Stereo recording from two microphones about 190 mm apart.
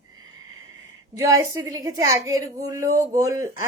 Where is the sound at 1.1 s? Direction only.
15° right (ahead or behind).